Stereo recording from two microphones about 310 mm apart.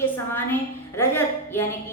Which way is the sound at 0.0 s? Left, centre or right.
Centre.